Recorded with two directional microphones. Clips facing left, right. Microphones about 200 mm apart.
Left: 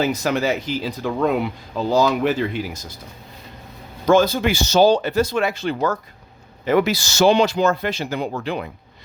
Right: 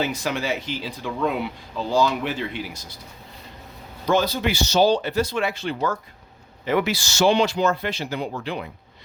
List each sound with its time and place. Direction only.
0.0 s speech: 40° left (ahead or behind)
4.0 s speech: 45° left (ahead or behind)